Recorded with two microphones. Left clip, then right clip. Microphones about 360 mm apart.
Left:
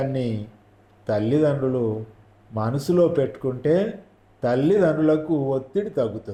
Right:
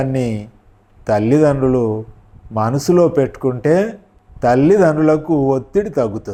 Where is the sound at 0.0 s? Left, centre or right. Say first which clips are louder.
Right 6 dB; right.